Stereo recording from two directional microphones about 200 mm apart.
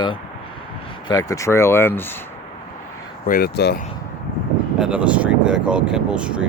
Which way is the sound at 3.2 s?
50° left (ahead or behind).